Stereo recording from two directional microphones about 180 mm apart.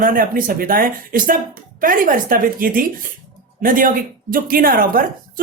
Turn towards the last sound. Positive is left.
turn(degrees=-50)  # may be behind; listen again after turning